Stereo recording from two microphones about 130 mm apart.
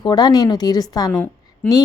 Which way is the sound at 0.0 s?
30° left (ahead or behind).